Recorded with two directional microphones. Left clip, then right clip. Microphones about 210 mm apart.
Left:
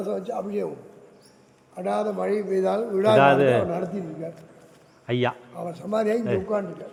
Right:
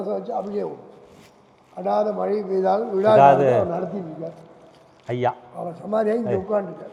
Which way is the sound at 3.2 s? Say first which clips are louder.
Right 5 dB; 45° left (ahead or behind).